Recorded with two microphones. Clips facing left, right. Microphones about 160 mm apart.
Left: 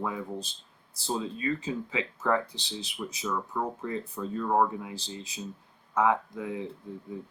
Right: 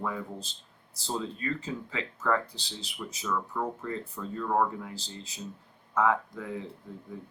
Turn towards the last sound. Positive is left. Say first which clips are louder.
# left 3 dB
turn(degrees=15)  # may be behind; listen again after turning